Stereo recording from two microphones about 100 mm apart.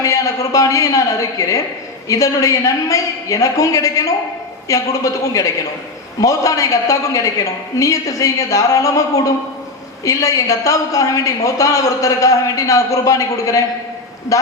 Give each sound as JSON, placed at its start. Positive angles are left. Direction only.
{"t": 0.5, "sound": "a woman's voice", "side_deg": 35}